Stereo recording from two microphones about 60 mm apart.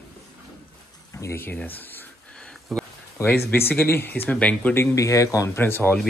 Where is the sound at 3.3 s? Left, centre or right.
Left.